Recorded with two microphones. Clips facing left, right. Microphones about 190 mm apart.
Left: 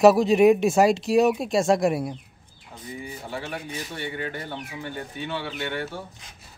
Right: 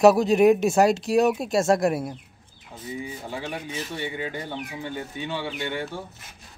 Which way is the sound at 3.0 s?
15° right (ahead or behind).